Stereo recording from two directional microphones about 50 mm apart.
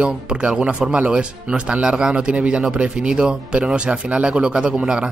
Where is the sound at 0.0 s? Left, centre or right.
Right.